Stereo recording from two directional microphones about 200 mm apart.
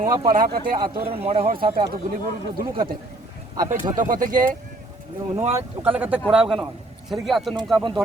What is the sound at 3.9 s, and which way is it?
Speech, 40° right (ahead or behind).